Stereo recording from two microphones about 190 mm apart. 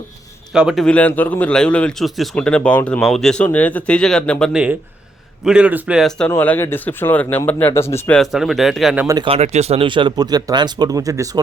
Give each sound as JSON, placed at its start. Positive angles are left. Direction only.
{"t": 0.5, "sound": "a man's voice", "side_deg": -5}
{"t": 9.0, "sound": "speech", "side_deg": -25}